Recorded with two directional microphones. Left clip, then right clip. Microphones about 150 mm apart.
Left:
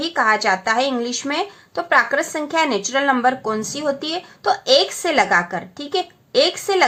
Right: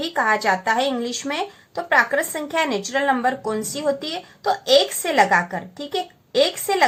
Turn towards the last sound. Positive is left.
turn(degrees=25)  # may be behind; listen again after turning